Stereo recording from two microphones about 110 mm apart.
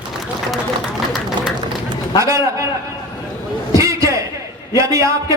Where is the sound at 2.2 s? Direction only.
30° right (ahead or behind).